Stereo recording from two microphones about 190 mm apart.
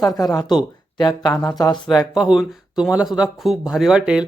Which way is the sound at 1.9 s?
5° right (ahead or behind).